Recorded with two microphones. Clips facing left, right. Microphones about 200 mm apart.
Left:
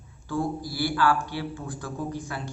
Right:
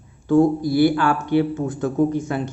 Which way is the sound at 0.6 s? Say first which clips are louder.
Right 9 dB; 20° right (ahead or behind).